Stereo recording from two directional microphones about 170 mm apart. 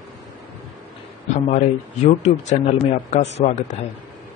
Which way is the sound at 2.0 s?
40° left (ahead or behind).